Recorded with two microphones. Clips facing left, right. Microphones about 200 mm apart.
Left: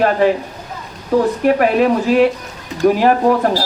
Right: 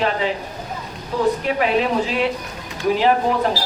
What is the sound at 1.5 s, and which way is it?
Speech, 50° left (ahead or behind).